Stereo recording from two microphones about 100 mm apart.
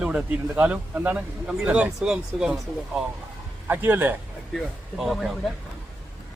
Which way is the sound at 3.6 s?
20° right (ahead or behind).